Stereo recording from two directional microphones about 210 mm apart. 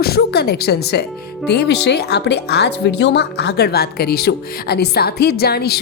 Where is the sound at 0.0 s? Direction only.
50° left (ahead or behind).